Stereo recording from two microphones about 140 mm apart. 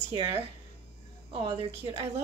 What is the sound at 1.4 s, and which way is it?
Speech, 40° right (ahead or behind).